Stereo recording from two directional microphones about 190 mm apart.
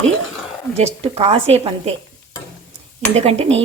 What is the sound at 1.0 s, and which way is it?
Speech, 30° right (ahead or behind).